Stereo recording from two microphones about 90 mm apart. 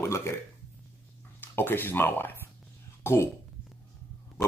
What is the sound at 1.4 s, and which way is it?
Speech, 25° left (ahead or behind).